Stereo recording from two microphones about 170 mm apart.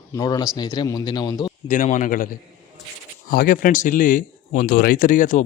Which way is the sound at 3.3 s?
55° left (ahead or behind).